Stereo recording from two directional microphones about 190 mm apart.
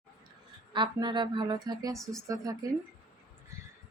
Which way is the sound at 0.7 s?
25° right (ahead or behind).